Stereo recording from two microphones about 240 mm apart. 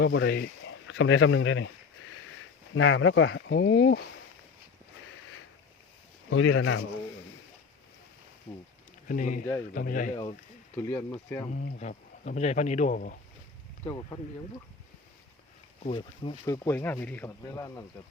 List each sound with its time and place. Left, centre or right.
0.0 s speech: left
6.3 s speech: left
9.0 s speech: left
10.8 s speech: centre
11.5 s speech: left
13.8 s speech: centre
15.8 s speech: left